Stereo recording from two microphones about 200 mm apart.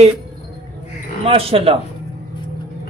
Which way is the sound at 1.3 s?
30° right (ahead or behind).